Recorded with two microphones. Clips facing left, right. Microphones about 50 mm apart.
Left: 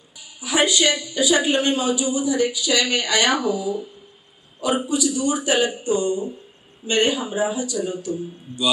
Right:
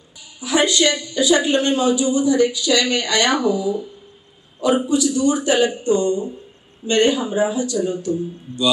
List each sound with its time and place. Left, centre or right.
0.4 s speech: centre
3.6 s speech: right
4.6 s speech: centre